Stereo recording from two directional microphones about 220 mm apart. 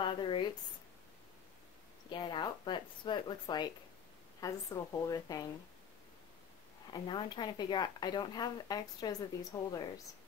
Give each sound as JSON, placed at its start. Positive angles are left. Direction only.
{"t": 0.0, "sound": "speech", "side_deg": 20}
{"t": 2.0, "sound": "a woman's voice", "side_deg": 20}
{"t": 6.9, "sound": "speech", "side_deg": 20}